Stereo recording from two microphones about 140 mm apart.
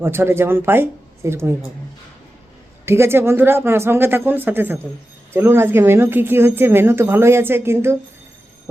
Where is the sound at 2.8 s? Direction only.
20° right (ahead or behind).